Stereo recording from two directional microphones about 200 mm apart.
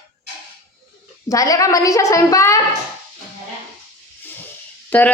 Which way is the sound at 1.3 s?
15° left (ahead or behind).